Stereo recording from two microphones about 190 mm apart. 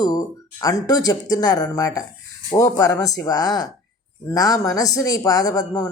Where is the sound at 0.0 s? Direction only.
20° left (ahead or behind).